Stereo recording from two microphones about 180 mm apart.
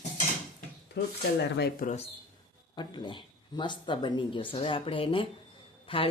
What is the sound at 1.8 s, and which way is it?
Speech, 45° left (ahead or behind).